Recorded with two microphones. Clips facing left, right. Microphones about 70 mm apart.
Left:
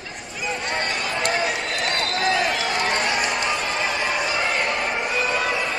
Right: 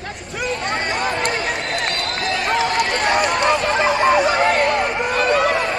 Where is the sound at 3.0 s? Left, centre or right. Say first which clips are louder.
Right 6 dB; right.